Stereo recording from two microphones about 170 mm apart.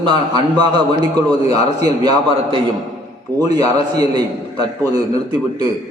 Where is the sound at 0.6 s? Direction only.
25° right (ahead or behind).